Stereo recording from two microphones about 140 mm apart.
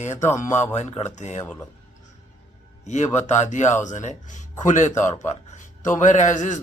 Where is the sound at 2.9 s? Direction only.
60° left (ahead or behind).